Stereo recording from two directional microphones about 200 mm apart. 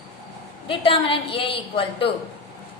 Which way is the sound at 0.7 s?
25° left (ahead or behind).